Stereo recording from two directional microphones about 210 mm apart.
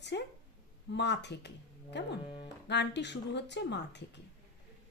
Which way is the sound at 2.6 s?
55° left (ahead or behind).